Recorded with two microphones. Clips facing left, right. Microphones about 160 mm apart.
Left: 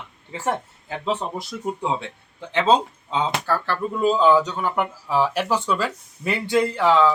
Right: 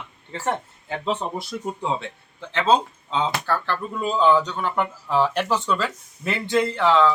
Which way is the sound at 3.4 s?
5° left (ahead or behind).